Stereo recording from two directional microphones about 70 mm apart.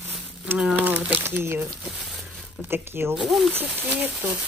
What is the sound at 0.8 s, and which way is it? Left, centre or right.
Speech, right.